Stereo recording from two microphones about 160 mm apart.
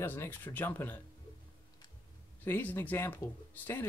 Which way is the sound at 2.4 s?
10° left (ahead or behind).